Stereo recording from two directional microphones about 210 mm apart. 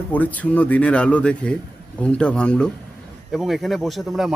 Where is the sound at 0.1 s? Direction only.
5° left (ahead or behind).